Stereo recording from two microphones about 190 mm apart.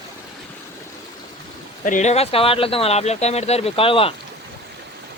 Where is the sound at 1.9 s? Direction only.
40° left (ahead or behind).